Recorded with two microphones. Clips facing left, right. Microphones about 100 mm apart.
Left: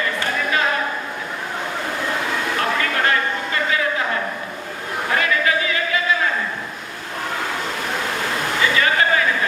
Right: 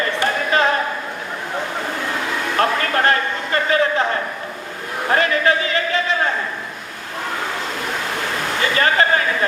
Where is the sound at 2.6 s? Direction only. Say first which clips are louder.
Right 6 dB; 40° right (ahead or behind).